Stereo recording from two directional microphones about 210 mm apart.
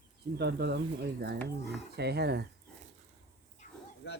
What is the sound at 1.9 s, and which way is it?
Speech, 50° right (ahead or behind).